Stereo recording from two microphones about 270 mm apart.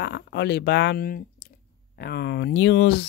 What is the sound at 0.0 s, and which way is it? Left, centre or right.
Speech, left.